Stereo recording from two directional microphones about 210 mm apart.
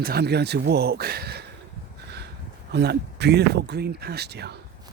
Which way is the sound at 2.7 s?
50° right (ahead or behind).